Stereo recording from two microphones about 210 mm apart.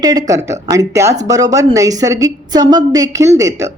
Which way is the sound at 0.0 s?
20° right (ahead or behind).